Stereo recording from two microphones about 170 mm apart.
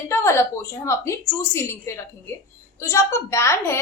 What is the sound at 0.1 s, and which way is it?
A woman's voice, 15° left (ahead or behind).